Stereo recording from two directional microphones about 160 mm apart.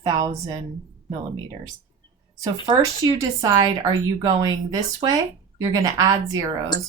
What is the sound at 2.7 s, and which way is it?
Speech, 20° right (ahead or behind).